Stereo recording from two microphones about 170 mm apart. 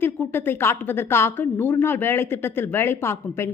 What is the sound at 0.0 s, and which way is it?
Speech, 10° left (ahead or behind).